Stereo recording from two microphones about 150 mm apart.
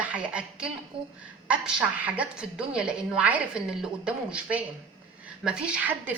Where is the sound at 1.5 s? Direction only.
5° right (ahead or behind).